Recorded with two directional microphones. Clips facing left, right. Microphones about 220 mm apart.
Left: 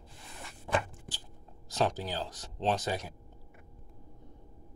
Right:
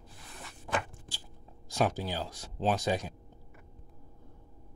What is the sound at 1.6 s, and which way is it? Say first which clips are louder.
Speech: right 1 dB; 10° right (ahead or behind).